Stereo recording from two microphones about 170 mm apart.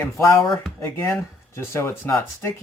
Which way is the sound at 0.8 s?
15° left (ahead or behind).